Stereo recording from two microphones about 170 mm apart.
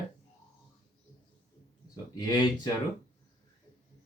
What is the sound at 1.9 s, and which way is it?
Speech, 25° left (ahead or behind).